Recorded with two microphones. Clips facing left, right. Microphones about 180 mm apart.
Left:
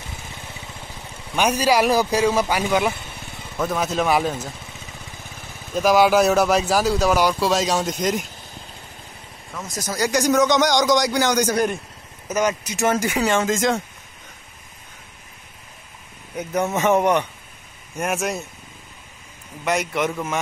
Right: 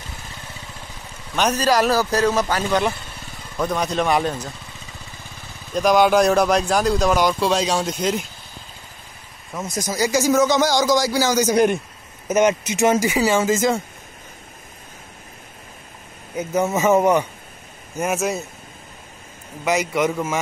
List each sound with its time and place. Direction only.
1.3 s speech: 10° left (ahead or behind)
5.7 s speech: 5° left (ahead or behind)
9.5 s speech: 20° right (ahead or behind)
9.8 s speech: 10° right (ahead or behind)
11.5 s speech: 20° right (ahead or behind); by 13.8 s centre (ahead or behind)
16.3 s speech: 5° right (ahead or behind)
19.9 s speech: 5° right (ahead or behind)